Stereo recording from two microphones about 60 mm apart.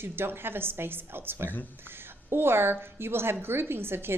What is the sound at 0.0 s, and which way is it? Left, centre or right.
A woman's voice, right.